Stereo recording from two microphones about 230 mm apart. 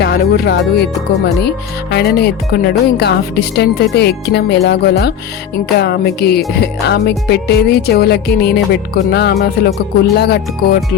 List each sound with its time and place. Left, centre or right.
0.0 s speech: left